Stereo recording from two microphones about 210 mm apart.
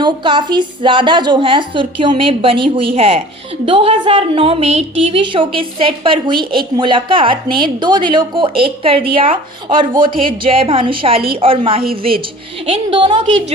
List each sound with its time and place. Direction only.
0.0 s a woman's voice: 20° right (ahead or behind)